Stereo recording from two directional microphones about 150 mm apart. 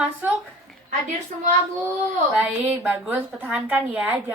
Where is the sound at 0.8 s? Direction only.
55° right (ahead or behind).